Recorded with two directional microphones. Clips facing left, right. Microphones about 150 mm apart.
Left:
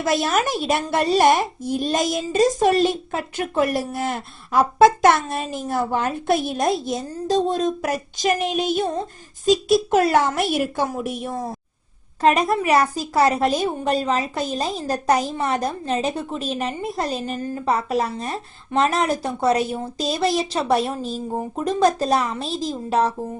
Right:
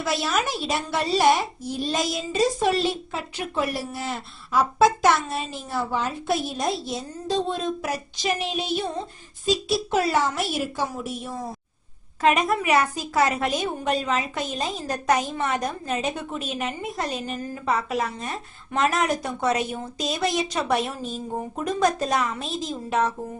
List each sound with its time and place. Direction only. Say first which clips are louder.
0.0 s a woman's voice: left 5 dB; 50° left (ahead or behind)
12.2 s a woman's voice: left 3 dB; 35° left (ahead or behind)